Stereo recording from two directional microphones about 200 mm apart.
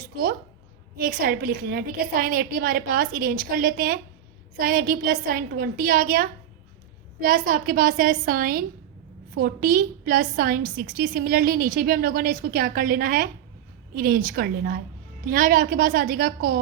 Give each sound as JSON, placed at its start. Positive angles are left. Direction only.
{"t": 0.9, "sound": "a woman's voice", "side_deg": -45}